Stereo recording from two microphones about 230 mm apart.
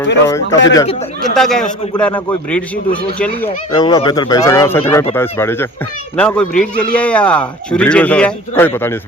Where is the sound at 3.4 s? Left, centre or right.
Centre.